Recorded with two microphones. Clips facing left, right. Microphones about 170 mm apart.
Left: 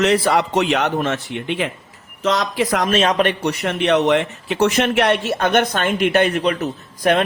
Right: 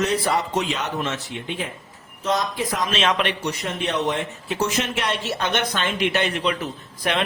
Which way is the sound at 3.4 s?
70° left (ahead or behind).